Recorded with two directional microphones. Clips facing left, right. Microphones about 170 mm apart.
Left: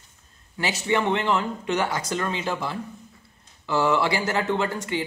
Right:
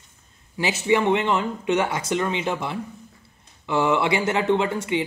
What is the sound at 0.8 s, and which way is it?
A man's voice, 20° right (ahead or behind).